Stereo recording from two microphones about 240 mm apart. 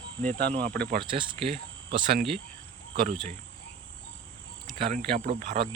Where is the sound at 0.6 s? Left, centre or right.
Centre.